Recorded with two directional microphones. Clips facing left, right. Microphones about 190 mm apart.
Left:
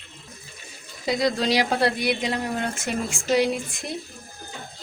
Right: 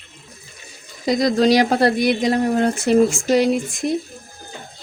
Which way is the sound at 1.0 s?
40° right (ahead or behind).